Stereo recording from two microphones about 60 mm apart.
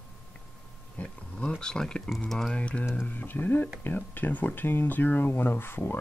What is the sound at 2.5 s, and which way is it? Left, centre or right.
Speech, left.